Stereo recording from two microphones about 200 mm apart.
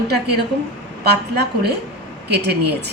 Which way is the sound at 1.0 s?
55° right (ahead or behind).